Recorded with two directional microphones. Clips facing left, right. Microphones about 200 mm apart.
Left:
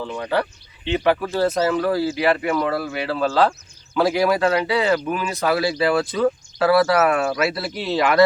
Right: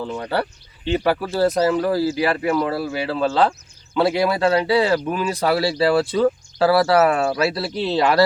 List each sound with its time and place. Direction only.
0.9 s speech: 40° right (ahead or behind)